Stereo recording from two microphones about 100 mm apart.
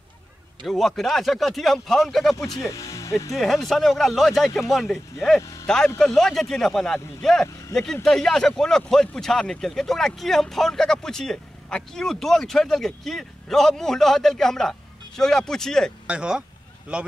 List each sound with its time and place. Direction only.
0.7 s speech: centre (ahead or behind)
2.6 s speech: 30° left (ahead or behind)
3.3 s speech: centre (ahead or behind)
5.4 s a sound: 30° left (ahead or behind)
5.9 s speech: 5° left (ahead or behind)
16.1 s speech: 10° right (ahead or behind)